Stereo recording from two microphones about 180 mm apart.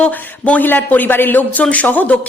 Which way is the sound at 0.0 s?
10° left (ahead or behind).